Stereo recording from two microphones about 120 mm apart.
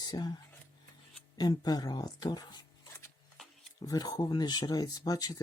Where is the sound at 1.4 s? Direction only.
35° left (ahead or behind).